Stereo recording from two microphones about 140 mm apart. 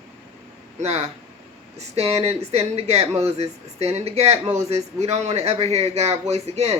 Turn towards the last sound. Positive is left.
turn(degrees=-50)  # may be behind; listen again after turning